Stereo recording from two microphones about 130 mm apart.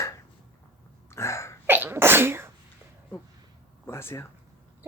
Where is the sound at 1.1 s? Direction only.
20° left (ahead or behind).